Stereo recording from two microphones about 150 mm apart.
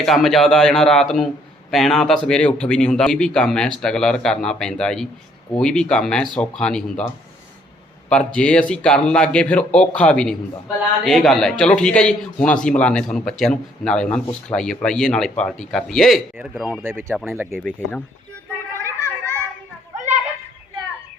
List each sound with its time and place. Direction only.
0.0 s a man's voice: centre (ahead or behind)
8.4 s a man's voice: 5° left (ahead or behind)
17.2 s speech: 15° right (ahead or behind)
17.5 s speech: 5° left (ahead or behind)
18.7 s children playing: 20° right (ahead or behind)
19.0 s children playing: 10° left (ahead or behind)